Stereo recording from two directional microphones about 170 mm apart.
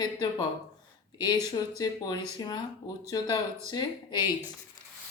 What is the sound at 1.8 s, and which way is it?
Speech, 25° left (ahead or behind).